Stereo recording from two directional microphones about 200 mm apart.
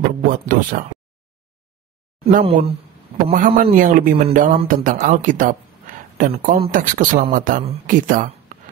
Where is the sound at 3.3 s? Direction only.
45° right (ahead or behind).